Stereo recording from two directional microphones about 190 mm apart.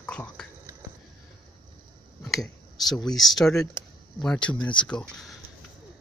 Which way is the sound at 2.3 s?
Centre (ahead or behind).